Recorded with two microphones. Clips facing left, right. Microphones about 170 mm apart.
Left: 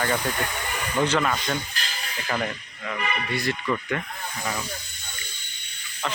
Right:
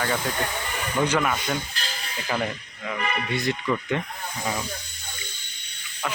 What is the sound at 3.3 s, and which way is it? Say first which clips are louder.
Speech: right 1 dB; 20° right (ahead or behind).